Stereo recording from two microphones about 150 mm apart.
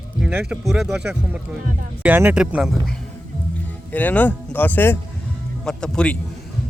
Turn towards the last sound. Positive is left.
turn(degrees=5)  # may be behind; listen again after turning